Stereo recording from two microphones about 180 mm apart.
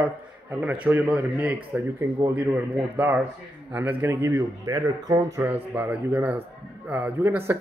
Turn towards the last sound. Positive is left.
turn(degrees=-10)  # may be behind; listen again after turning